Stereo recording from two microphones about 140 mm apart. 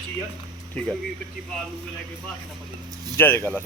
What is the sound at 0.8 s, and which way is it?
Speech, 5° left (ahead or behind).